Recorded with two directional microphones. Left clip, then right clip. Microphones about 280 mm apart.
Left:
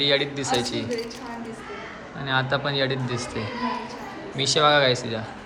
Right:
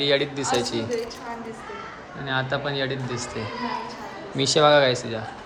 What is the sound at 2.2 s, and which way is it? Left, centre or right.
A woman's voice, centre.